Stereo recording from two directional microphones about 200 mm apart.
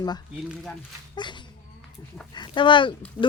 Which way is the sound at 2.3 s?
25° left (ahead or behind).